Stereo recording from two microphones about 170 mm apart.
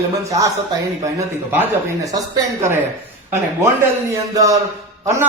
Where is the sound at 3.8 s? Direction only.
20° right (ahead or behind).